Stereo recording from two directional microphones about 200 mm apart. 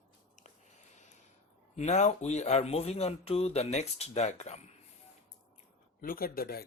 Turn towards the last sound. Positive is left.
turn(degrees=50)  # may be behind; listen again after turning